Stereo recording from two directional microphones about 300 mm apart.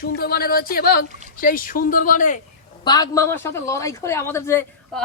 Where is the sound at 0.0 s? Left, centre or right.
Left.